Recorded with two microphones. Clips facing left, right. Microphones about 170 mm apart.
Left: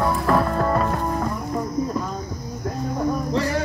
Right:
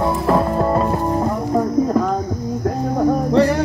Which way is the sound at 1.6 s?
75° right (ahead or behind).